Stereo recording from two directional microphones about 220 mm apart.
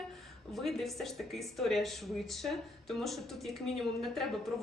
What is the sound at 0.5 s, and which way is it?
Speech, centre (ahead or behind).